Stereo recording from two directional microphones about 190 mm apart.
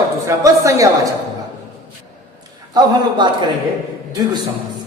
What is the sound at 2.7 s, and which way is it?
Speech, 25° right (ahead or behind).